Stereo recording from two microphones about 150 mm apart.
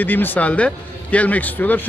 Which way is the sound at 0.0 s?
10° left (ahead or behind).